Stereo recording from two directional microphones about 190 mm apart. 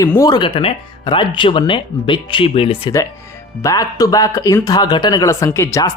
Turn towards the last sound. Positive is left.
turn(degrees=15)  # may be behind; listen again after turning